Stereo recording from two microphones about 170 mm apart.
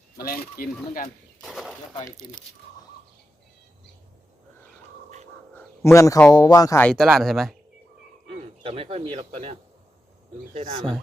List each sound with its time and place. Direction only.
0.2 s speech: 60° left (ahead or behind)
1.4 s a sound: centre (ahead or behind)
2.0 s speech: 25° left (ahead or behind)
5.5 s speech: 15° left (ahead or behind)
6.7 s speech: 5° left (ahead or behind)
8.3 s speech: 35° right (ahead or behind)